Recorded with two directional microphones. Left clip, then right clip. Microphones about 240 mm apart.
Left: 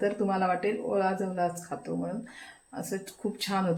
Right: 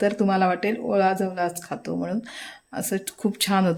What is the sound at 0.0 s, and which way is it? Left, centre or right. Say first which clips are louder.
A woman's voice: right 6 dB; right.